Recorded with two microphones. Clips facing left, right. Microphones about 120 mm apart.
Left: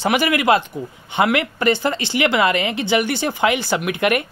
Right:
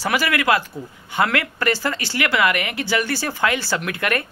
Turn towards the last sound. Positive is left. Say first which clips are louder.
# left 5 dB
turn(degrees=20)  # may be behind; listen again after turning